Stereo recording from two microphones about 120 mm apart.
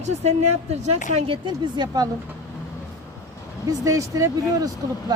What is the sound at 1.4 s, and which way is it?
Speech, 35° right (ahead or behind).